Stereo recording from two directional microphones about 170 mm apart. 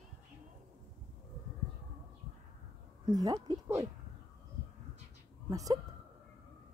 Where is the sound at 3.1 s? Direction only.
25° right (ahead or behind).